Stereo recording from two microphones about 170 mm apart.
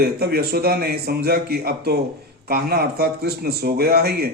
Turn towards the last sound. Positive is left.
turn(degrees=-65)  # may be behind; listen again after turning